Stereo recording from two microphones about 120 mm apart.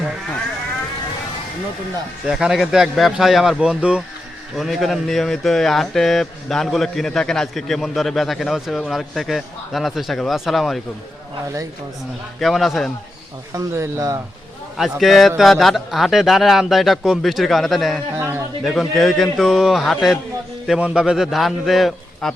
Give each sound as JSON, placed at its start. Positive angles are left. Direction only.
{"t": 2.2, "sound": "speech", "side_deg": -5}
{"t": 12.4, "sound": "speech", "side_deg": 0}
{"t": 13.5, "sound": "speech", "side_deg": -25}
{"t": 14.8, "sound": "speech", "side_deg": 0}
{"t": 18.2, "sound": "speech", "side_deg": -20}
{"t": 18.6, "sound": "speech", "side_deg": 0}